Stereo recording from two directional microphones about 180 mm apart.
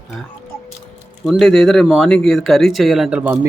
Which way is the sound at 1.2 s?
Centre (ahead or behind).